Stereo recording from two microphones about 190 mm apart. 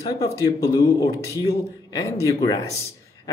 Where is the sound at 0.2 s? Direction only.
20° left (ahead or behind).